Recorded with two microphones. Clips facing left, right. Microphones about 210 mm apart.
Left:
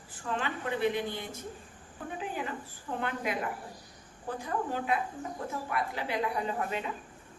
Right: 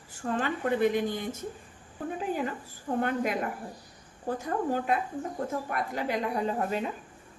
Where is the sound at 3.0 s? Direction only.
45° right (ahead or behind).